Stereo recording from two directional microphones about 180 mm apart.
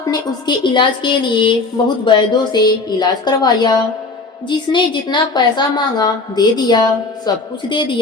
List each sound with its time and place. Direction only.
0.0 s a woman's voice: 25° left (ahead or behind)